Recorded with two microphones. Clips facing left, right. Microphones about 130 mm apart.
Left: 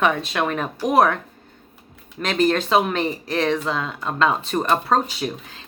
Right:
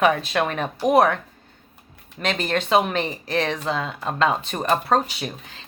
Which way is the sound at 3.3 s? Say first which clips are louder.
Left 1 dB; 35° right (ahead or behind).